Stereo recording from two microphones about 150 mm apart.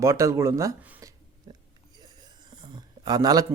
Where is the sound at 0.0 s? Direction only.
20° right (ahead or behind).